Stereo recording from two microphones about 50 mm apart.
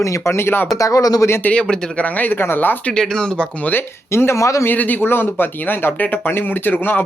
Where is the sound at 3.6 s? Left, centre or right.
Left.